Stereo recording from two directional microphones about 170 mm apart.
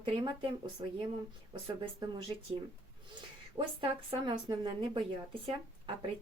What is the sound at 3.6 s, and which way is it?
Speech, 30° right (ahead or behind).